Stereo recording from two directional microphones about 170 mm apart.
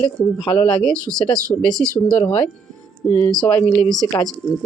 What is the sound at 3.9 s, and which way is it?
Speech, 20° left (ahead or behind).